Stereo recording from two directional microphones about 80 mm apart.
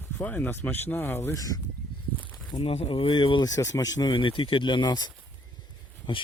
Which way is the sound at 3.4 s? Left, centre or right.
Left.